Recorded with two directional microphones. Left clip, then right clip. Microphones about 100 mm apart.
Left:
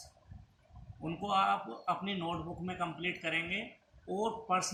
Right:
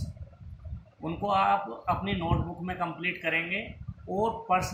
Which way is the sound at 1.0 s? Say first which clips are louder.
Right 5 dB; 40° left (ahead or behind).